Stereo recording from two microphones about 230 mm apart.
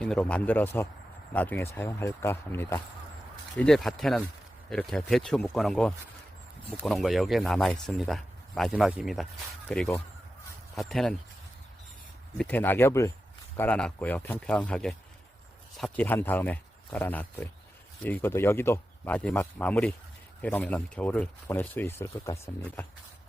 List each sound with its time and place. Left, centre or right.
0.0 s speech: centre
12.4 s speech: centre